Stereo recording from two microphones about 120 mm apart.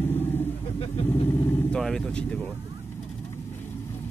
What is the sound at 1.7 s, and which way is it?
Speech, 5° left (ahead or behind).